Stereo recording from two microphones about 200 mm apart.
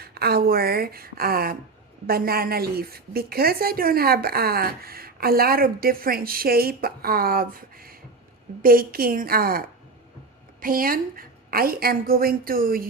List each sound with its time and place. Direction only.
0.0 s a woman's voice: 50° right (ahead or behind)